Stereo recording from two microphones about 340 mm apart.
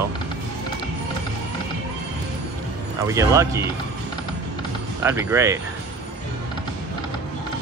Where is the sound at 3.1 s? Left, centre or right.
Centre.